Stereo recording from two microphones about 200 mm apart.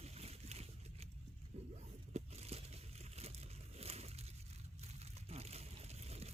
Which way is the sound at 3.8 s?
30° right (ahead or behind).